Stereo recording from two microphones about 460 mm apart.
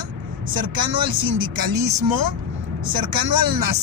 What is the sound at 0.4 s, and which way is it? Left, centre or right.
Speech, right.